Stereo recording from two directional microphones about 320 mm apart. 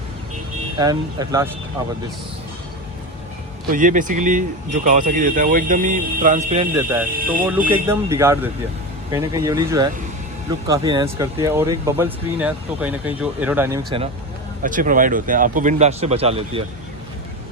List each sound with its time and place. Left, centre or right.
0.8 s speech: centre
3.7 s speech: right
7.7 s speech: centre
14.6 s speech: right